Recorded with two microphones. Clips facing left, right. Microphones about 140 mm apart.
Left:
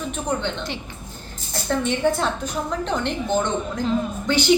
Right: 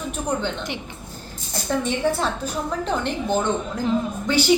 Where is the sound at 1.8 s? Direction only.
5° right (ahead or behind).